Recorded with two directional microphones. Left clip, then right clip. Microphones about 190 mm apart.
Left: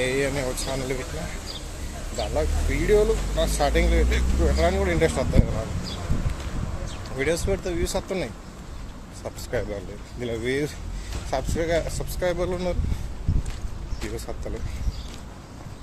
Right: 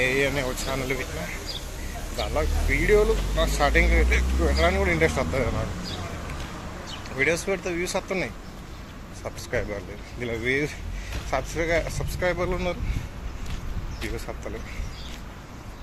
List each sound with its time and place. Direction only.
0.0 s speech: 15° left (ahead or behind)
2.1 s speech: 10° left (ahead or behind)
7.2 s speech: 15° left (ahead or behind)